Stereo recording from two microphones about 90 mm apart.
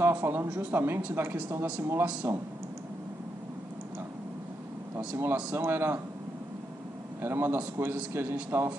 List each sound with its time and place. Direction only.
0.0 s speech: 25° right (ahead or behind)
4.9 s speech: 25° right (ahead or behind)
7.2 s speech: 25° right (ahead or behind)